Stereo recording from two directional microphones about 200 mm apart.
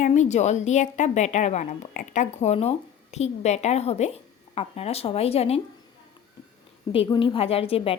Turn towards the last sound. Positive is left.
turn(degrees=30)  # may be behind; listen again after turning